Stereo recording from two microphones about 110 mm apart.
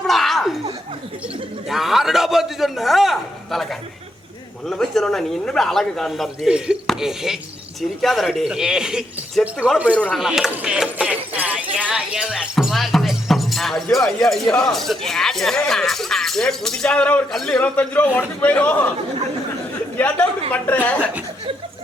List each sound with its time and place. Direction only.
0.1 s laughter: centre (ahead or behind)
1.7 s speech: 5° right (ahead or behind)
11.1 s music: 15° right (ahead or behind); by 13.8 s centre (ahead or behind)
13.9 s speech: centre (ahead or behind)
17.6 s a man's voice: 15° left (ahead or behind)
20.0 s a man's voice: 15° left (ahead or behind)